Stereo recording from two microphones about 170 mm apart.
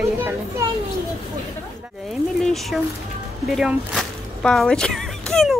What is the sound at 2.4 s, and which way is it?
Speech, centre (ahead or behind).